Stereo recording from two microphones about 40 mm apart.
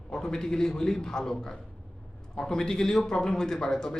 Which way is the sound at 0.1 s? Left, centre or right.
Centre.